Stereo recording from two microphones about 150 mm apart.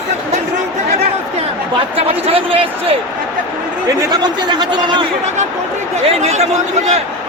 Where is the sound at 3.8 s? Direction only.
30° right (ahead or behind).